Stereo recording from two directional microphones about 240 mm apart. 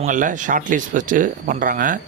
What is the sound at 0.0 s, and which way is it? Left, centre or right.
Speech, right.